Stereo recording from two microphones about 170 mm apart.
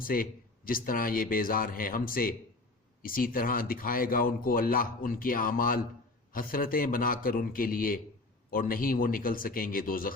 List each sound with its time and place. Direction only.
0.0 s speech: 55° left (ahead or behind)